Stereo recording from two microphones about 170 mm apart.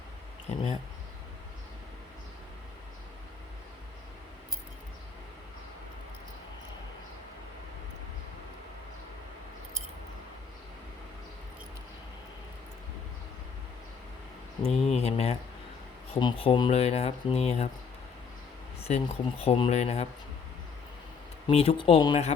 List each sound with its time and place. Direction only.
14.6 s a sound: 40° left (ahead or behind)
16.1 s speech: 35° left (ahead or behind)
18.9 s speech: 35° left (ahead or behind)
21.4 s speech: 35° left (ahead or behind)